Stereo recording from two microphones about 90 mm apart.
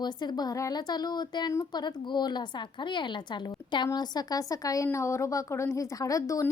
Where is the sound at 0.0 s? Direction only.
50° left (ahead or behind).